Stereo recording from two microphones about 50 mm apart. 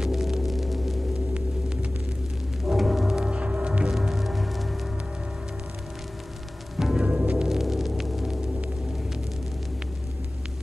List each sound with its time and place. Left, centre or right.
0.0 s gong: centre
2.6 s music: centre
3.2 s music: right
3.9 s music: centre
6.8 s music: centre
7.1 s music: right
7.4 s a sound: centre